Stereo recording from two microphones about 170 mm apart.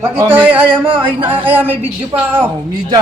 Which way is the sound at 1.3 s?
10° right (ahead or behind).